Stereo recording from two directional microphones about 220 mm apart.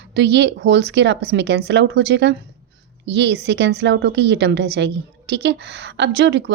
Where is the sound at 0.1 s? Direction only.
50° right (ahead or behind).